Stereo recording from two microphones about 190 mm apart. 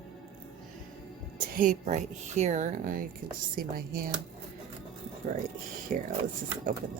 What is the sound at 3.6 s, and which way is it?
Speech, 50° right (ahead or behind).